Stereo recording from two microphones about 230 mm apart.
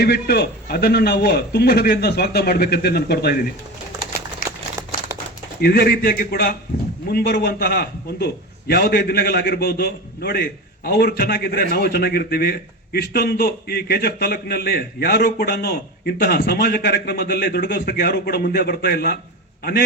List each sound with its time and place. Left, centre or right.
0.0 s a man's voice: left
4.4 s a sound: left
5.5 s a man's voice: left